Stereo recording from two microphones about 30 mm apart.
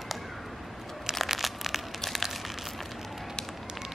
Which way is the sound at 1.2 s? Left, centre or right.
Centre.